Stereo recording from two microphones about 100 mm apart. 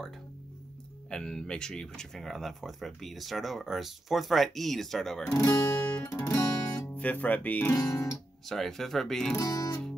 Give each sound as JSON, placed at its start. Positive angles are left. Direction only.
{"t": 1.1, "sound": "speech", "side_deg": 10}
{"t": 5.2, "sound": "speech", "side_deg": 30}
{"t": 6.0, "sound": "music", "side_deg": 30}
{"t": 6.9, "sound": "speech", "side_deg": 15}
{"t": 7.7, "sound": "guitar", "side_deg": 35}
{"t": 8.5, "sound": "speech", "side_deg": 5}
{"t": 9.3, "sound": "guitar", "side_deg": 35}